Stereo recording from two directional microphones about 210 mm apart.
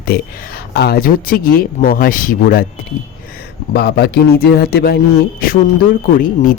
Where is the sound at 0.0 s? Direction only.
45° left (ahead or behind).